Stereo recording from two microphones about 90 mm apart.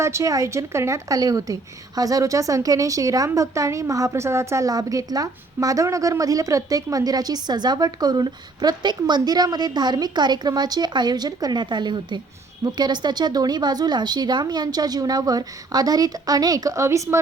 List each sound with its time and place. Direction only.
0.0 s a woman's voice: 35° right (ahead or behind)